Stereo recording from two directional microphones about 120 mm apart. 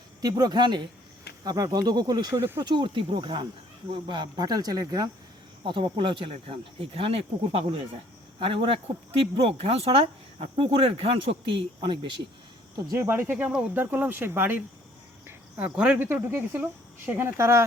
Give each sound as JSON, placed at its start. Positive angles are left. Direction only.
{"t": 0.2, "sound": "speech", "side_deg": -35}
{"t": 5.6, "sound": "speech", "side_deg": -45}
{"t": 13.0, "sound": "speech", "side_deg": -20}
{"t": 15.3, "sound": "cricket", "side_deg": -15}
{"t": 15.7, "sound": "speech", "side_deg": -10}